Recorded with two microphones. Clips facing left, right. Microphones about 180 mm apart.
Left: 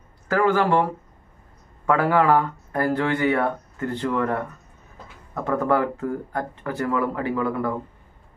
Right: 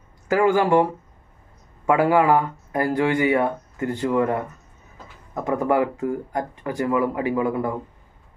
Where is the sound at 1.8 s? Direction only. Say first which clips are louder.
Right 2 dB; 15° right (ahead or behind).